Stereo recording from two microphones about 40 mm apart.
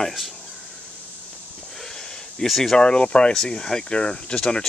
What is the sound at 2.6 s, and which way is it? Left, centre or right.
Speech, centre.